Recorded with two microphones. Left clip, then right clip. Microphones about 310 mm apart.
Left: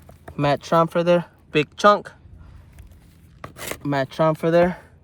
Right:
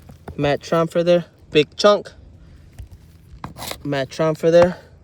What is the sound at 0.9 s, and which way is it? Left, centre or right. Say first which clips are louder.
Speech: right 2 dB; centre.